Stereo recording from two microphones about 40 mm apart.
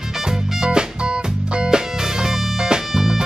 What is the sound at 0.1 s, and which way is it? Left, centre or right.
Music, centre.